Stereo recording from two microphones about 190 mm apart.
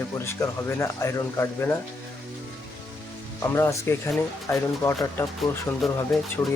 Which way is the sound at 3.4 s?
15° left (ahead or behind).